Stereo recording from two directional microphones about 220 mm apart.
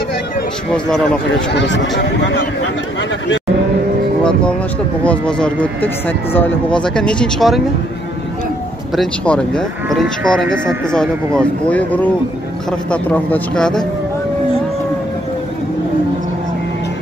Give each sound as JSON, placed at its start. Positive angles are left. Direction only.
{"t": 1.5, "sound": "speech", "side_deg": 50}
{"t": 4.2, "sound": "music", "side_deg": 5}
{"t": 5.0, "sound": "speech", "side_deg": 5}
{"t": 8.9, "sound": "speech", "side_deg": 5}